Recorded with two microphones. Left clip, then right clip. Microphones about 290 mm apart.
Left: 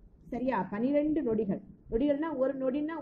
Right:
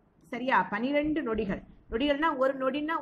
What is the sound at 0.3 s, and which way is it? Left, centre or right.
A woman's voice, right.